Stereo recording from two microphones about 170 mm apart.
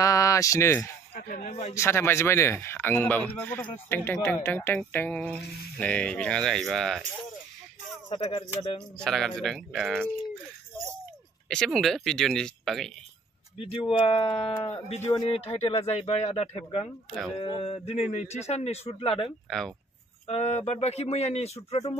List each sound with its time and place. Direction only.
0.0 s speech: 20° left (ahead or behind)
1.1 s a sound: 55° left (ahead or behind)
1.5 s a man's voice: 40° left (ahead or behind)
1.8 s speech: 15° left (ahead or behind)
8.1 s speech: 30° left (ahead or behind)
8.9 s speech: 5° left (ahead or behind)
11.4 s speech: centre (ahead or behind)
13.6 s a man's voice: 30° left (ahead or behind)